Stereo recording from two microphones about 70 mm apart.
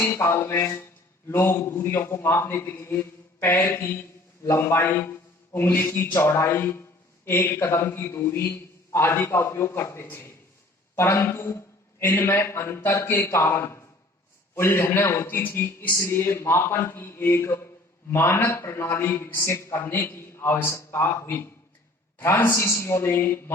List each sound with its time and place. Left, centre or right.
0.2 s a man's voice: left